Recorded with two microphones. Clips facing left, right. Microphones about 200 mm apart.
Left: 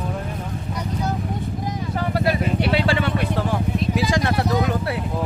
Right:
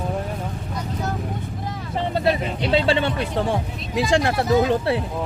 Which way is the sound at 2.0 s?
25° right (ahead or behind).